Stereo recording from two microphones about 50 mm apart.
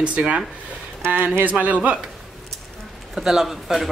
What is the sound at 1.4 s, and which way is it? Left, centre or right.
Speech, right.